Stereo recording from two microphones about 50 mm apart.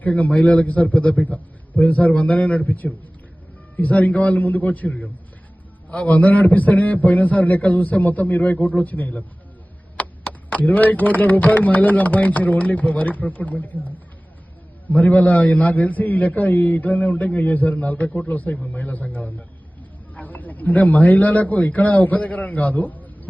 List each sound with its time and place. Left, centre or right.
0.0 s a man's voice: left
10.0 s a sound: left
10.6 s a man's voice: left